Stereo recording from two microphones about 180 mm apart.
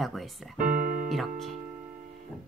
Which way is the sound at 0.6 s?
50° right (ahead or behind).